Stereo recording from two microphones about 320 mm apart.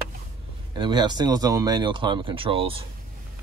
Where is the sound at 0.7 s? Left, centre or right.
Centre.